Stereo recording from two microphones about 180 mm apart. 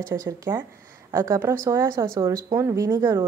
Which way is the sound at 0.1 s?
20° right (ahead or behind).